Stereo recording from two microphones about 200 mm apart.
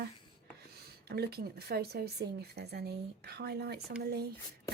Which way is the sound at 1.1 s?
50° right (ahead or behind).